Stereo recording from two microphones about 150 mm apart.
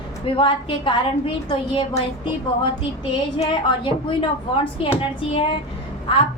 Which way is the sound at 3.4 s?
30° left (ahead or behind).